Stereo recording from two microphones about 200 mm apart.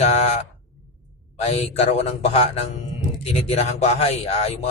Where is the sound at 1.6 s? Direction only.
30° left (ahead or behind).